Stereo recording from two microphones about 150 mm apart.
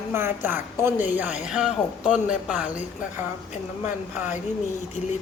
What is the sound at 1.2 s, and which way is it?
Speech, 50° left (ahead or behind).